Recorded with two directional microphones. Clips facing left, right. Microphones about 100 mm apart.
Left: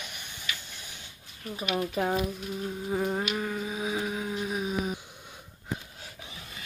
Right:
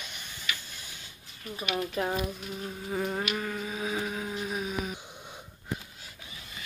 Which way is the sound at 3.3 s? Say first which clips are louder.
Left 2 dB; 5° left (ahead or behind).